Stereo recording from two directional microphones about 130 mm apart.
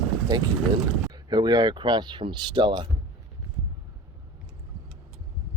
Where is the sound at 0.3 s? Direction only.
30° right (ahead or behind).